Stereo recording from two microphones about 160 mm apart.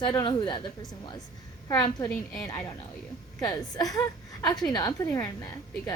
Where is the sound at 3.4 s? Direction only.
25° left (ahead or behind).